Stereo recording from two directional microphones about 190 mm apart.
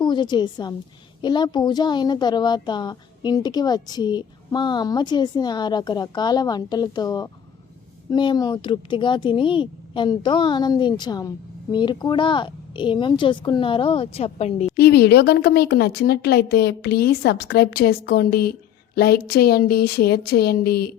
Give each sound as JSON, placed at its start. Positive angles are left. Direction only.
{"t": 0.0, "sound": "a child's voice", "side_deg": 25}
{"t": 14.8, "sound": "speech", "side_deg": 60}